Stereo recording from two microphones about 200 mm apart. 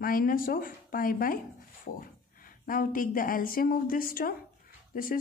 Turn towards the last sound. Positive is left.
turn(degrees=45)  # may be behind; listen again after turning